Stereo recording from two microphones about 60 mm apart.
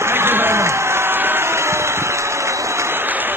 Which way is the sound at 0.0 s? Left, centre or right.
Right.